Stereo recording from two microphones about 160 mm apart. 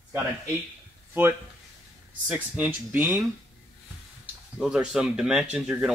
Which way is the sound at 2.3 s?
10° right (ahead or behind).